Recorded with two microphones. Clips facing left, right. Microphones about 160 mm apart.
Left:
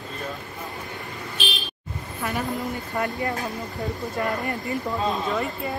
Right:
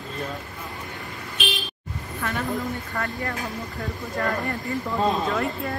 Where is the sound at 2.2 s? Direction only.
10° left (ahead or behind).